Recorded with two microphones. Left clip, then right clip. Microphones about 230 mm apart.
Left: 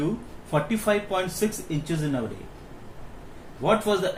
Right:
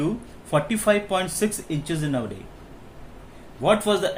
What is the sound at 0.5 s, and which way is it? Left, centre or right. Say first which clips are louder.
A man's voice: right 3 dB; right.